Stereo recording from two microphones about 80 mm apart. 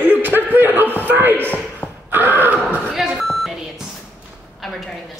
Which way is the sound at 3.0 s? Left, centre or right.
Centre.